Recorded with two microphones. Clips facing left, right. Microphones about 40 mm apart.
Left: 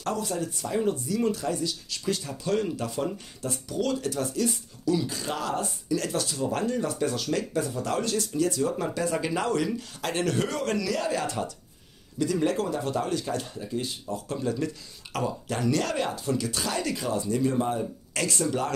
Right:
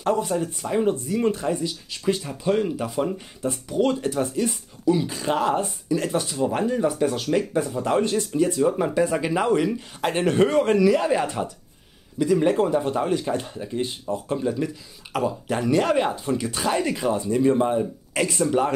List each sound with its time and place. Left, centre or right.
0.0 s speech: right